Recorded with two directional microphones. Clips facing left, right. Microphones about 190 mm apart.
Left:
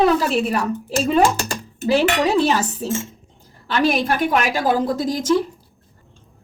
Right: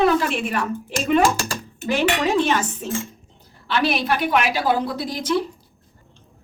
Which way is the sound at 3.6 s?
45° left (ahead or behind).